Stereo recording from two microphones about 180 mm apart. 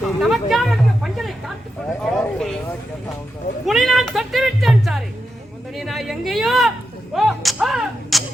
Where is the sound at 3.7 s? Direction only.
Centre (ahead or behind).